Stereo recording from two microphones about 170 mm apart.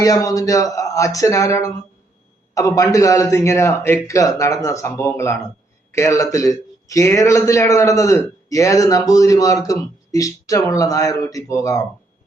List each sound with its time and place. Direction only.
0.0 s a man's voice: 20° left (ahead or behind)